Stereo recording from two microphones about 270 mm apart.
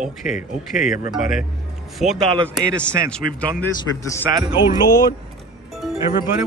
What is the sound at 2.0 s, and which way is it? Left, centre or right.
A man's voice, centre.